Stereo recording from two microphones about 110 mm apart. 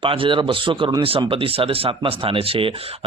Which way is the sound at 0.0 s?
55° right (ahead or behind).